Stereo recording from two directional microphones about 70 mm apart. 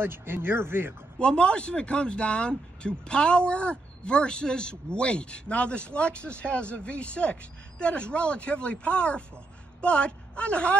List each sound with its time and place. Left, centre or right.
0.0 s speech: right
1.2 s speech: centre